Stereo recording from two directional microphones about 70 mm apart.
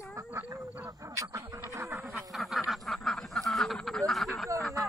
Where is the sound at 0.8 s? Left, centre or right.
Right.